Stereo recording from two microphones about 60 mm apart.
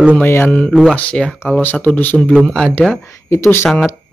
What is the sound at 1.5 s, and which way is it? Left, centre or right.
Speech, left.